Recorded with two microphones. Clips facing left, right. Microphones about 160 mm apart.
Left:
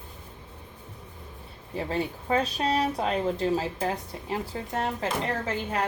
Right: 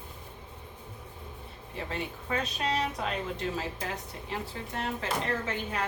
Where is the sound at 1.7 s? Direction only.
35° left (ahead or behind).